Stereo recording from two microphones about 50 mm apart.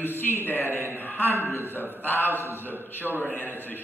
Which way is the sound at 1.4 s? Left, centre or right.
Left.